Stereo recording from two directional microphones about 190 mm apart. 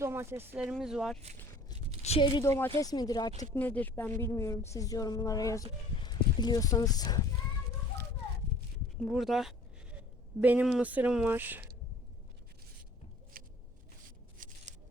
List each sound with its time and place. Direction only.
0.0 s speech: 15° right (ahead or behind)
2.0 s speech: 30° left (ahead or behind)
3.5 s speech: 10° left (ahead or behind)
9.0 s a sound: centre (ahead or behind)
10.4 s speech: 10° right (ahead or behind)
13.3 s a sound: 50° right (ahead or behind)